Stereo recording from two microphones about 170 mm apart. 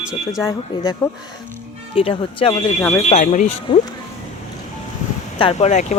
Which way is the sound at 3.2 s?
50° left (ahead or behind).